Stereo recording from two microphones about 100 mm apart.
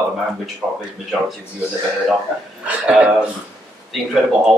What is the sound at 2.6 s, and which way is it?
Speech, 10° right (ahead or behind).